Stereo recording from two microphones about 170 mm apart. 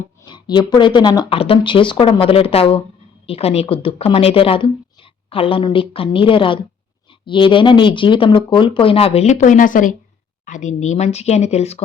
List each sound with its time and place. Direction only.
0.3 s speech: 25° left (ahead or behind)